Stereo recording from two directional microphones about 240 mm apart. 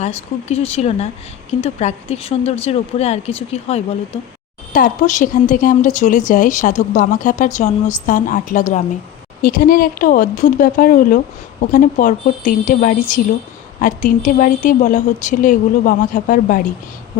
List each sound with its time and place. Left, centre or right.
0.0 s speech: left